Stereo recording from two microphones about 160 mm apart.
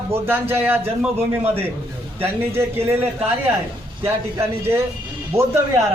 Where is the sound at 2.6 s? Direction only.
15° right (ahead or behind).